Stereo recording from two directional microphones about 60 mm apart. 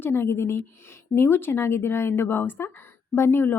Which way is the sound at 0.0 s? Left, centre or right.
Left.